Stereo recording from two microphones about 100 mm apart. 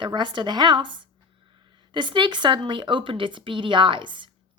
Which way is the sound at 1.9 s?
55° right (ahead or behind).